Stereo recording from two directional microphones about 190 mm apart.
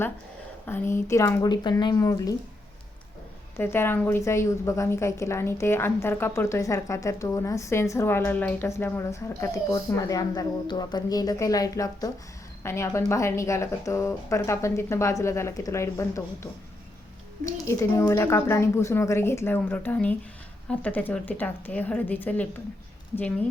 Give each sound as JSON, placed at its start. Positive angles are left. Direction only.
{"t": 0.6, "sound": "a woman's voice", "side_deg": 10}
{"t": 3.6, "sound": "a woman's voice", "side_deg": 10}